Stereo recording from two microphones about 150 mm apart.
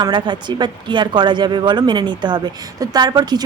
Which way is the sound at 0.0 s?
30° right (ahead or behind).